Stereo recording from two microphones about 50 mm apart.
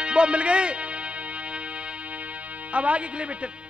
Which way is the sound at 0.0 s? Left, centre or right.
Right.